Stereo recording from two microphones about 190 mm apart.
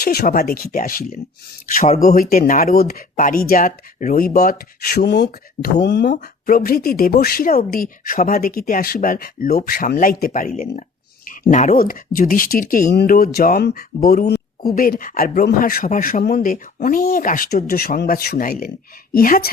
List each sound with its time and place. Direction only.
0.0 s speech: 50° left (ahead or behind)
6.1 s speech: 45° left (ahead or behind)